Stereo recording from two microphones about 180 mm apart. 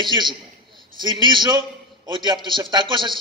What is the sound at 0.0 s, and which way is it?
A man's voice, 25° right (ahead or behind).